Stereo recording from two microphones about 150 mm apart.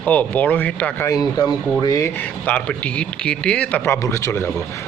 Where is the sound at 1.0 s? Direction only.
25° left (ahead or behind).